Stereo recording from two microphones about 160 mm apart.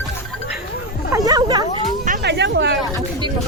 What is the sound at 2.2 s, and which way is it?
Speech, 90° right.